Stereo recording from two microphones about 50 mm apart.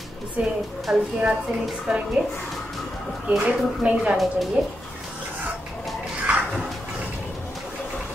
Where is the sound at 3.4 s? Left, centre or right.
Right.